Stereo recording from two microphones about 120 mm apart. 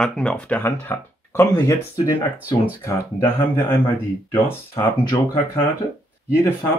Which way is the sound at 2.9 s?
25° left (ahead or behind).